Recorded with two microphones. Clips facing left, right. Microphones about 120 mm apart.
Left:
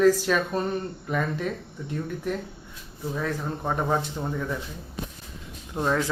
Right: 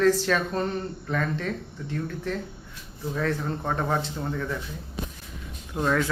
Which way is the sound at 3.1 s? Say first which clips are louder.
Right 2 dB; 10° left (ahead or behind).